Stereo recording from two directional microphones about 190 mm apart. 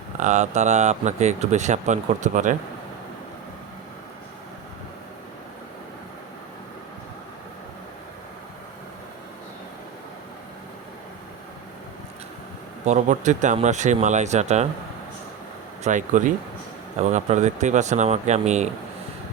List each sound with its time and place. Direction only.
0.2 s speech: 40° right (ahead or behind)
12.8 s speech: 40° right (ahead or behind)
15.8 s speech: 40° right (ahead or behind)